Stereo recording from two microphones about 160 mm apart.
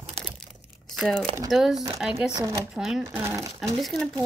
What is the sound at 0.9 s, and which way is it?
Speech, centre (ahead or behind).